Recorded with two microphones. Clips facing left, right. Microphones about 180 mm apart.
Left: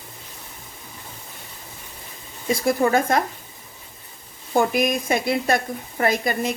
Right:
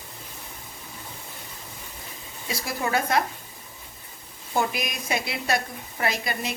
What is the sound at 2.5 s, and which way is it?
Speech, 50° left (ahead or behind).